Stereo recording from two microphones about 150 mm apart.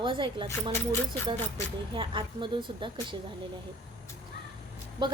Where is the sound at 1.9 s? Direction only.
35° right (ahead or behind).